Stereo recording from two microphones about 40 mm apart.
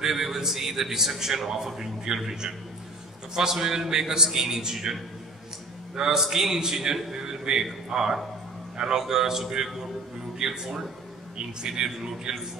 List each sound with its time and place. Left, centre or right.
0.0 s a man's voice: centre
5.9 s a man's voice: centre
7.1 s a sound: centre
7.9 s a man's voice: centre